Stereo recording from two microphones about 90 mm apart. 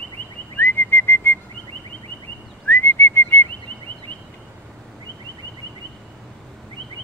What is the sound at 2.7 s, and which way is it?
Whistling, 25° left (ahead or behind).